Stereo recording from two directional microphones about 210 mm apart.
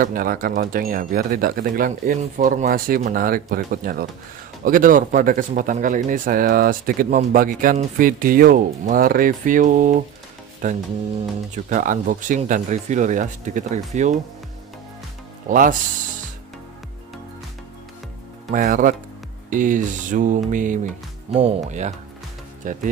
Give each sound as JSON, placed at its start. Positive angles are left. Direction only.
{"t": 0.0, "sound": "speech", "side_deg": -40}
{"t": 15.4, "sound": "speech", "side_deg": -40}
{"t": 18.5, "sound": "speech", "side_deg": -40}